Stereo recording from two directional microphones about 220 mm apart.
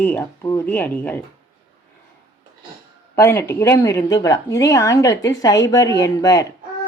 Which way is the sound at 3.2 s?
10° left (ahead or behind).